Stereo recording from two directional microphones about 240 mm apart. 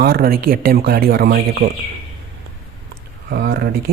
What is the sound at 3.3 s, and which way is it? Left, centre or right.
Speech, right.